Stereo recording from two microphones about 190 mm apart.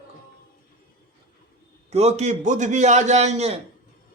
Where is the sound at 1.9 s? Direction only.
35° right (ahead or behind).